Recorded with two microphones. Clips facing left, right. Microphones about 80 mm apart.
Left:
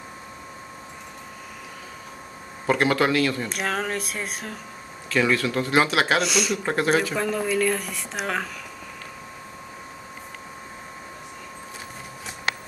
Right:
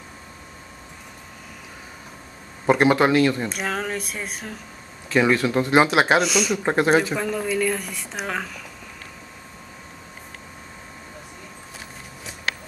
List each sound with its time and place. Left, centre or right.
2.6 s speech: centre
3.4 s a woman's voice: centre
5.1 s speech: right
6.2 s a woman's voice: centre
6.6 s speech: right
7.2 s a woman's voice: centre